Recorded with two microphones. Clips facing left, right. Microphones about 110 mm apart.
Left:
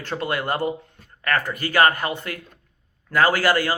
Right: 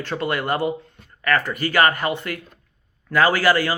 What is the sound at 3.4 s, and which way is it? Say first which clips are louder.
Speech: right 2 dB; 45° left (ahead or behind).